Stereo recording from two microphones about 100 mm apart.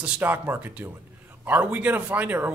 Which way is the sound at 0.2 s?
20° right (ahead or behind).